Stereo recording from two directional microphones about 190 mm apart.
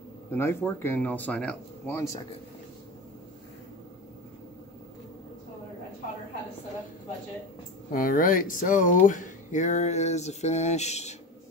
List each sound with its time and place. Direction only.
0.3 s speech: 15° left (ahead or behind)
7.9 s speech: 45° left (ahead or behind)